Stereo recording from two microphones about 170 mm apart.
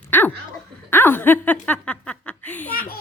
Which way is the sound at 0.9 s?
10° left (ahead or behind).